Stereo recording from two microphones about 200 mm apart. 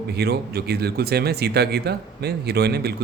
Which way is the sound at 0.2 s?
55° right (ahead or behind).